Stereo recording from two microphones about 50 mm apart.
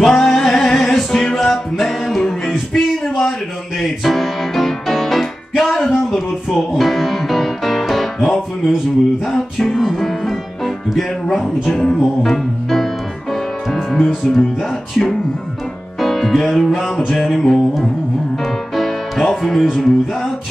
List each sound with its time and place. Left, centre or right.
0.0 s music: centre
2.7 s a sound: centre
3.8 s music: centre
10.9 s speech: centre
12.2 s music: centre
14.2 s speech: centre
16.0 s music: centre
19.6 s speech: centre